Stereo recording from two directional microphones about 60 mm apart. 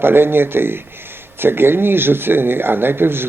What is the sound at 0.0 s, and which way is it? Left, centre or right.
Speech, right.